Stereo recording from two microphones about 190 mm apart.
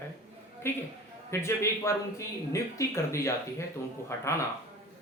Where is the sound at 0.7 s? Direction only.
10° left (ahead or behind).